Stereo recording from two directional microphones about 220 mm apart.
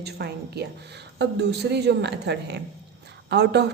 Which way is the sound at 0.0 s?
50° right (ahead or behind).